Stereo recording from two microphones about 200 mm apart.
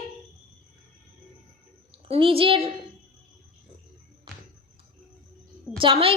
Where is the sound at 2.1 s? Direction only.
25° right (ahead or behind).